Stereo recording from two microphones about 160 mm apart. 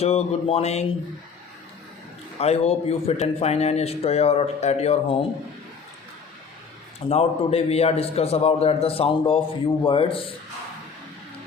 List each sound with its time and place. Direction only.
0.0 s speech: 40° left (ahead or behind)
2.4 s speech: 40° left (ahead or behind)
7.1 s speech: 40° left (ahead or behind)